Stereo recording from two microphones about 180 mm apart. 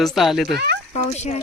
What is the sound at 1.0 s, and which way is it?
Speech, 40° left (ahead or behind).